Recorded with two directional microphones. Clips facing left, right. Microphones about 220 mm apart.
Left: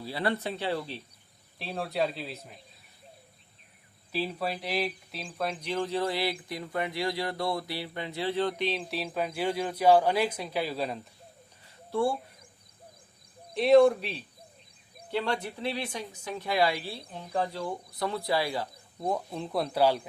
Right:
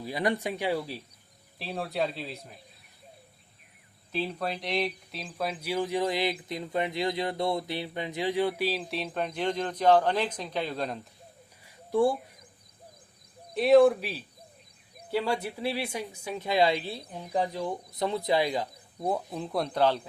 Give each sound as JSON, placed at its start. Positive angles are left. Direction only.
{"t": 0.0, "sound": "speech", "side_deg": -15}
{"t": 4.1, "sound": "speech", "side_deg": 5}
{"t": 11.6, "sound": "a sound", "side_deg": -15}
{"t": 13.6, "sound": "speech", "side_deg": 0}
{"t": 16.4, "sound": "speech", "side_deg": -20}
{"t": 19.0, "sound": "speech", "side_deg": -5}